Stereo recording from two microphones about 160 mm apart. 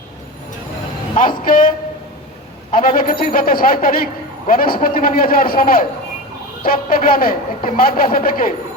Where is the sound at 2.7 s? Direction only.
65° left (ahead or behind).